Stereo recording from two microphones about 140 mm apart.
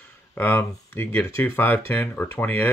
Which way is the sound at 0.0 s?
15° left (ahead or behind).